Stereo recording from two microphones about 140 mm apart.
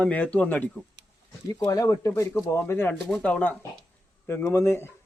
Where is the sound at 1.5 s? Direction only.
25° left (ahead or behind).